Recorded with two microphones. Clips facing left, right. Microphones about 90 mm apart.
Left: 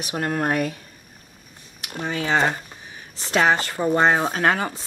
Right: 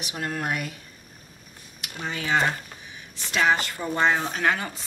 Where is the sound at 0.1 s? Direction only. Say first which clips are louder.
Left 6 dB; 40° left (ahead or behind).